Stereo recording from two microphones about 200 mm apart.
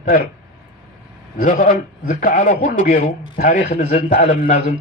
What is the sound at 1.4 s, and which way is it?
A man's voice, 40° left (ahead or behind).